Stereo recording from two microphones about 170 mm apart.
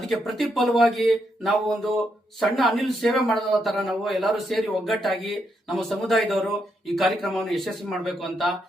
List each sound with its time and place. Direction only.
0.1 s speech: centre (ahead or behind)